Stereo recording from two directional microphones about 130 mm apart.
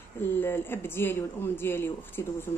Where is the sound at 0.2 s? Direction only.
15° left (ahead or behind).